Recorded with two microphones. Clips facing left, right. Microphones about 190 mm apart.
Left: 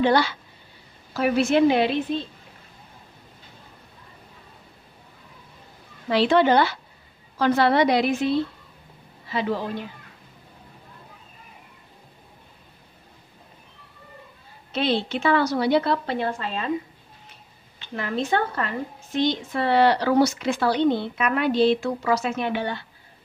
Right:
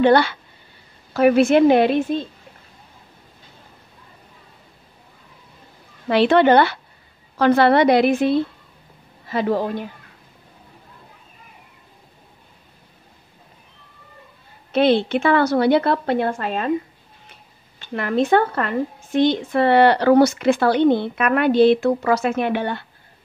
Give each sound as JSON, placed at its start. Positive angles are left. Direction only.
{"t": 0.0, "sound": "a woman's voice", "side_deg": -60}
{"t": 6.0, "sound": "a woman's voice", "side_deg": -60}
{"t": 14.7, "sound": "a woman's voice", "side_deg": -60}
{"t": 17.9, "sound": "a woman's voice", "side_deg": -60}